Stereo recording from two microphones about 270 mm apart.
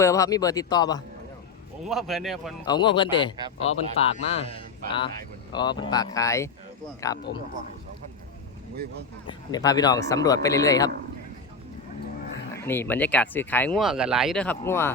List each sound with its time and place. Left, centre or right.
0.0 s a man's voice: centre
1.8 s speech: centre
2.6 s a man's voice: centre
7.3 s speech: left
8.7 s speech: right
9.2 s a man's voice: centre
12.6 s speech: centre